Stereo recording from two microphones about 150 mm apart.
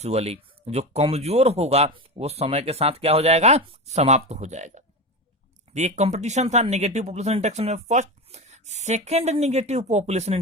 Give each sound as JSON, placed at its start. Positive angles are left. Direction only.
{"t": 0.0, "sound": "speech", "side_deg": -45}